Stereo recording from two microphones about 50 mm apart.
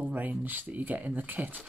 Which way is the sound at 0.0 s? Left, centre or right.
Right.